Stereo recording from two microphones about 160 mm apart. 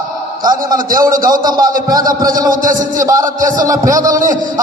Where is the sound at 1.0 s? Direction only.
60° right (ahead or behind).